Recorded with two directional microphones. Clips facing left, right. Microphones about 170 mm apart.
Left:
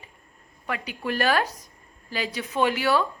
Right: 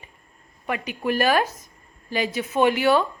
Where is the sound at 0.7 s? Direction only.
15° right (ahead or behind).